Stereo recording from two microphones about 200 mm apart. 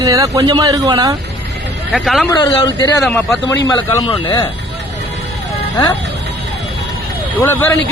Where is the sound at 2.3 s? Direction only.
20° left (ahead or behind).